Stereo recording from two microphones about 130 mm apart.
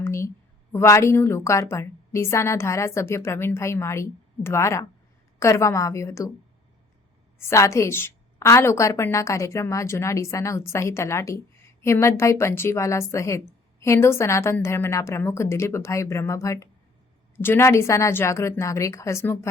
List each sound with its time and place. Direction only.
0.0 s a sound: 20° left (ahead or behind)
0.7 s a woman's voice: 20° left (ahead or behind)
7.3 s a woman's voice: 20° left (ahead or behind)